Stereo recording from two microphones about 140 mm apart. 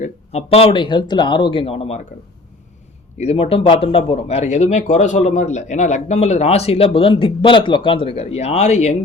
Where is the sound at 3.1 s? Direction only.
45° left (ahead or behind).